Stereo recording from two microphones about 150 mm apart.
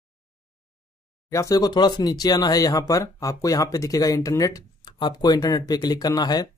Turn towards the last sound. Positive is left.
turn(degrees=25)  # may be behind; listen again after turning